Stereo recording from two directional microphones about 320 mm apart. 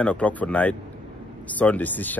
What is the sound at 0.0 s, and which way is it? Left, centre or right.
Speech, centre.